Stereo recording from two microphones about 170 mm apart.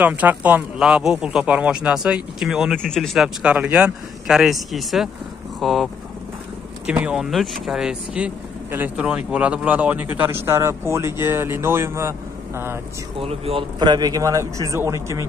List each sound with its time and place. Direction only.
0.0 s speech: 10° right (ahead or behind)
6.9 s a man's voice: 5° right (ahead or behind)
13.2 s a man's voice: 35° right (ahead or behind); by 15.2 s 15° right (ahead or behind)